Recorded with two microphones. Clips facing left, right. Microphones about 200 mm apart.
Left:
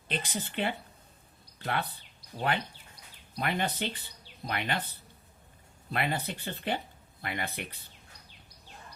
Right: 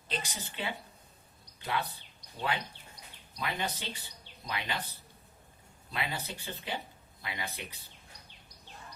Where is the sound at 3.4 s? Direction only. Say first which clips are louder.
Left 5 dB; 55° left (ahead or behind).